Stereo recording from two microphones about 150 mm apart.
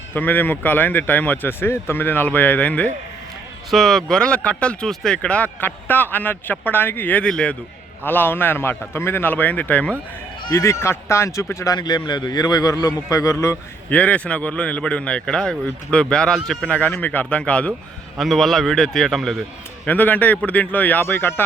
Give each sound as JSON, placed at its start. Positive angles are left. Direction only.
{"t": 0.1, "sound": "speech", "side_deg": 10}
{"t": 10.4, "sound": "speech", "side_deg": 20}
{"t": 14.0, "sound": "a man's voice", "side_deg": 10}